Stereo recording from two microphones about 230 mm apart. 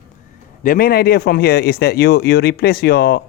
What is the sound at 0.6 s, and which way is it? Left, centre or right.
Speech, left.